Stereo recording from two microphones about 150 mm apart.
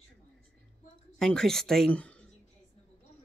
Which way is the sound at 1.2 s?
5° left (ahead or behind).